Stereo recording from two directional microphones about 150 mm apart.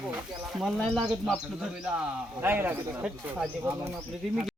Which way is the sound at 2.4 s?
15° right (ahead or behind).